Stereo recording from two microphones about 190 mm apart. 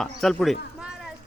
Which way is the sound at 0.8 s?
Centre (ahead or behind).